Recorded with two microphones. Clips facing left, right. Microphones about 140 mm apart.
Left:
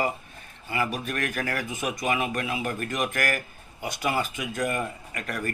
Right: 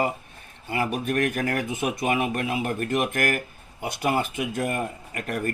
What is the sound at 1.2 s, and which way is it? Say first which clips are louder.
Speech: right 5 dB; 35° right (ahead or behind).